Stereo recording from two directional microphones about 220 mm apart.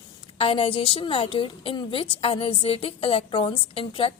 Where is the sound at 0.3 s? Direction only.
25° left (ahead or behind).